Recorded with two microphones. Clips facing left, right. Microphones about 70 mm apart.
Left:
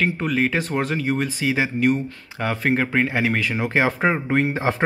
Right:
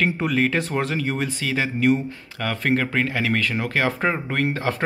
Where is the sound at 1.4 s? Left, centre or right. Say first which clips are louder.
Left 1 dB; centre.